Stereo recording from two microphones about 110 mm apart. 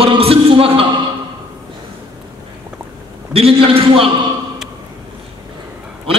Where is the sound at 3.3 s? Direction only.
60° right (ahead or behind).